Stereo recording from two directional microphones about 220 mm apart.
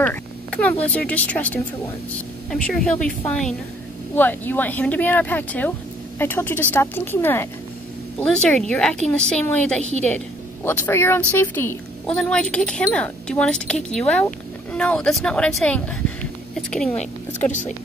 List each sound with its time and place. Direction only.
0.0 s speech: 5° left (ahead or behind)
16.9 s speech: 30° left (ahead or behind)